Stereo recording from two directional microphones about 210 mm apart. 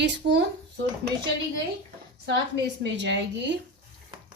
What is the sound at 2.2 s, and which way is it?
A woman's voice, 55° right (ahead or behind).